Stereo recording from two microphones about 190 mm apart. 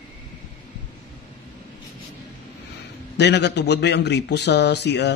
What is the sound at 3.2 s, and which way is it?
A man's voice, 65° left (ahead or behind).